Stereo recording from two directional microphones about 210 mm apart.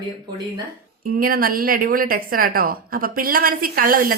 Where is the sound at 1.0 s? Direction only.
45° right (ahead or behind).